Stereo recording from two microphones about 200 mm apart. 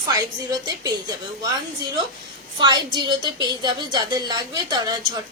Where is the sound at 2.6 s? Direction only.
20° right (ahead or behind).